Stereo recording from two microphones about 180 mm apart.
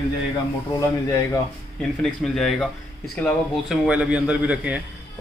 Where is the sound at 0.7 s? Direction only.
15° left (ahead or behind).